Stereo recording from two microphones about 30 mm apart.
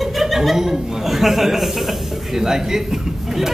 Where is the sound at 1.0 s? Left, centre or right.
Centre.